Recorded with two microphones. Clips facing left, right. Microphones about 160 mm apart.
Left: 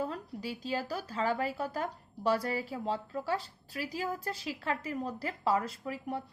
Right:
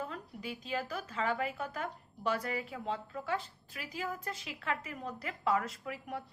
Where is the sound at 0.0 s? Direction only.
35° left (ahead or behind).